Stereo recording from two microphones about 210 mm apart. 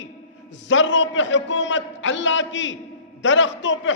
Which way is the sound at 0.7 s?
60° left (ahead or behind).